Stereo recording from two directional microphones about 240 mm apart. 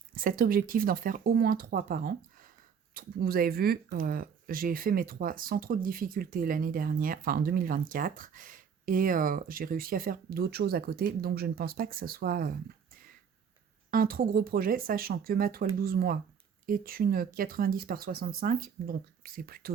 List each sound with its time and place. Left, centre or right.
0.1 s speech: right